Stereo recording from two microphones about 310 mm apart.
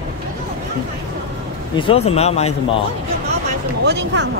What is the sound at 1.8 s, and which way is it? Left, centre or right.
Speech, centre.